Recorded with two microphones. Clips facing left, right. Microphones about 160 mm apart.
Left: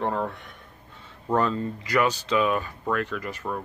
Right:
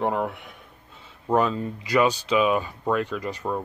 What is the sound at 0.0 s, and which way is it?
Speech, 15° right (ahead or behind).